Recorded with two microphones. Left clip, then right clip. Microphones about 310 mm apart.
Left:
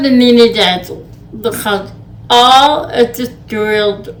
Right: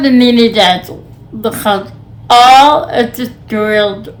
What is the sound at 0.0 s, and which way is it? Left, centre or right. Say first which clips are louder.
A woman's voice: left 1 dB; centre.